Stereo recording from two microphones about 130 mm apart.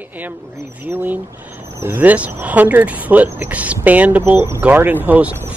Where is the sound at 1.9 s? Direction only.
10° right (ahead or behind).